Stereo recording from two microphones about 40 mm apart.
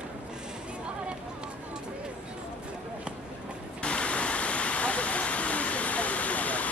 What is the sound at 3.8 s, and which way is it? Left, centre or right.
Waterfall, left.